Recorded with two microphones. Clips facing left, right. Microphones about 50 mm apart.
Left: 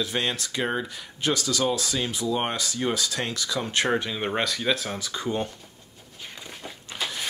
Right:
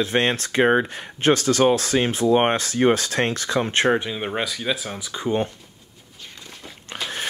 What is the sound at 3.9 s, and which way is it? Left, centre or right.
Speech, centre.